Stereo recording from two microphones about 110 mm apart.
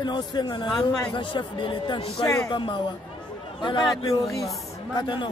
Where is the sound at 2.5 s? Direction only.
45° left (ahead or behind).